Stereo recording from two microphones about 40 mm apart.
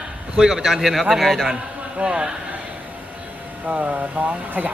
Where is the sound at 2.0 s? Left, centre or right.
Right.